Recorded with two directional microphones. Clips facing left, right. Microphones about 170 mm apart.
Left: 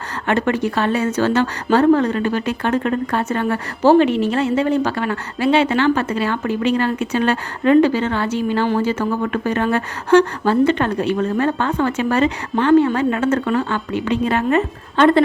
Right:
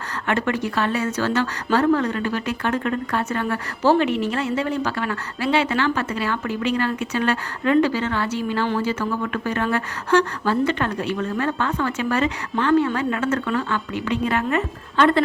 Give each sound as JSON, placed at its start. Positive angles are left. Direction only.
{"t": 0.3, "sound": "a woman's voice", "side_deg": 25}
{"t": 9.3, "sound": "a woman's voice", "side_deg": 25}